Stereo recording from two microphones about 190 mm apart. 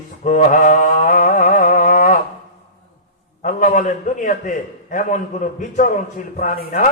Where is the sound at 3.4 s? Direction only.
45° left (ahead or behind).